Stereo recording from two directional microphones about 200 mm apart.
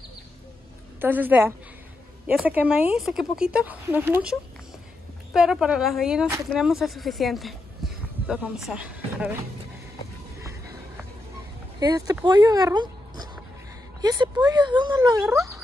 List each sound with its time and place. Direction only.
1.0 s a woman's voice: 10° right (ahead or behind)
10.4 s a sound: 15° right (ahead or behind)
11.8 s speech: 20° right (ahead or behind)